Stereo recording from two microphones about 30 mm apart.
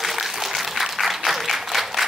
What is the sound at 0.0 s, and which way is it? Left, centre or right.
Applause, centre.